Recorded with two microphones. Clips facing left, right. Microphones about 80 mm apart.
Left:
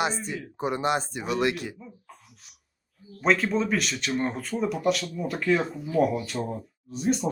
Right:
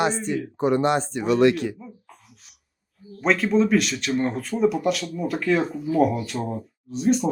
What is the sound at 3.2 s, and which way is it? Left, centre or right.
Speech, centre.